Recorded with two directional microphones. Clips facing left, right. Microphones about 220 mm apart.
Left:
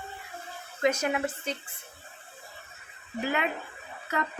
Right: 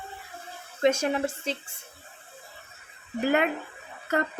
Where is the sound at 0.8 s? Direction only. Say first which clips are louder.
Right 3 dB; 30° right (ahead or behind).